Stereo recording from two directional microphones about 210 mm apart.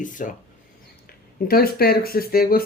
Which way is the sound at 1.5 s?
45° left (ahead or behind).